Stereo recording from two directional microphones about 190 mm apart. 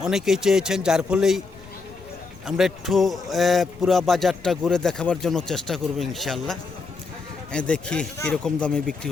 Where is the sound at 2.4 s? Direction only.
Centre (ahead or behind).